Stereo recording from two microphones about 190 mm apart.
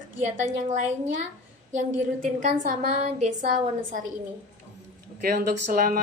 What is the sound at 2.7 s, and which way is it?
A woman's voice, 35° right (ahead or behind).